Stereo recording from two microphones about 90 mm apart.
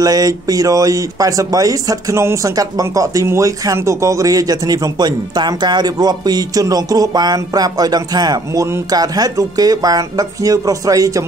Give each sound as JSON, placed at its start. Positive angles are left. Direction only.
{"t": 0.0, "sound": "speech", "side_deg": -45}
{"t": 5.0, "sound": "a man's voice", "side_deg": -55}